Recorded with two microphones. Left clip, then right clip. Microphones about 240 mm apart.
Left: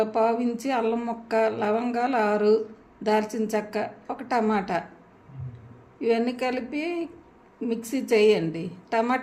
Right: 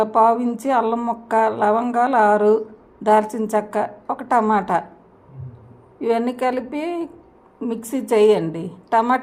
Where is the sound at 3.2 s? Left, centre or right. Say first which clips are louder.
Right 4 dB; right.